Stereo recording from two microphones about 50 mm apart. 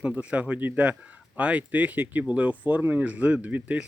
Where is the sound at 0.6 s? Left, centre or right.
Right.